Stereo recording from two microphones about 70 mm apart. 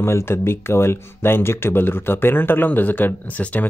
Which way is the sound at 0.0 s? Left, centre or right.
Left.